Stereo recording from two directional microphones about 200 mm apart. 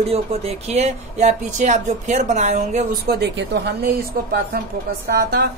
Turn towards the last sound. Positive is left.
turn(degrees=-50)  # may be behind; listen again after turning